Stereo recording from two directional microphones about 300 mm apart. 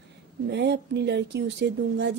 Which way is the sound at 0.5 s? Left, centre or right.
Right.